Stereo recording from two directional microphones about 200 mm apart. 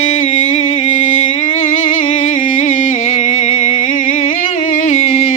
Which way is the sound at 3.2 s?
35° left (ahead or behind).